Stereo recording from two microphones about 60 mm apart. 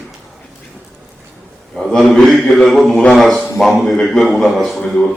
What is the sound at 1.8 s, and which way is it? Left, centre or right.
A man's voice, centre.